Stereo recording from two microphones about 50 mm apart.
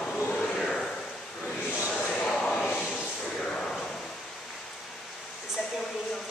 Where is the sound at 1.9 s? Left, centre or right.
Left.